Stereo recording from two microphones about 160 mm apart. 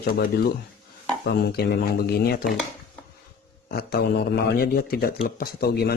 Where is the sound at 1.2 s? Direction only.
80° left.